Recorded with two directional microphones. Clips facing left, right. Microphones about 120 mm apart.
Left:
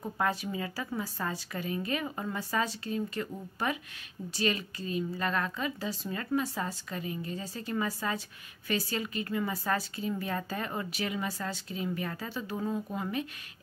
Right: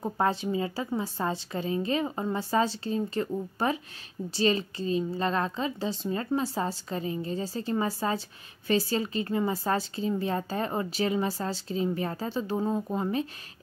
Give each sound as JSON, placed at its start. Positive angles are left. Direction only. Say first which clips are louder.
{"t": 0.0, "sound": "a woman's voice", "louder": "right 4 dB", "side_deg": -30}